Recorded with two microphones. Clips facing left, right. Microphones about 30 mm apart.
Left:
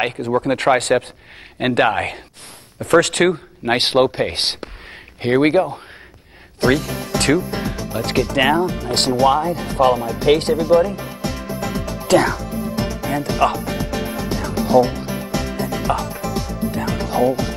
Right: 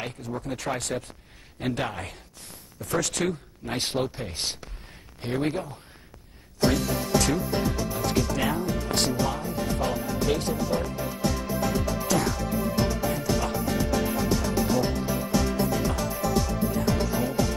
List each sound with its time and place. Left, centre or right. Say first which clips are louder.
0.0 s speech: left 14 dB; left
11.7 s music: left 13 dB; left
13.3 s speech: left 11 dB; left
13.9 s music: left 2 dB; left
15.9 s speech: left 7 dB; left
16.7 s music: left 7 dB; left